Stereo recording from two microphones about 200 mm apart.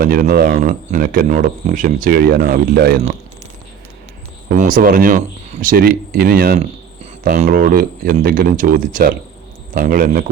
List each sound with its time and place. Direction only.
0.0 s speech: 45° right (ahead or behind)
4.4 s speech: 40° right (ahead or behind)